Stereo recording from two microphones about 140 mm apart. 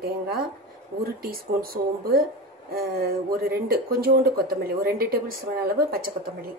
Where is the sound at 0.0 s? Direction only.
90° right.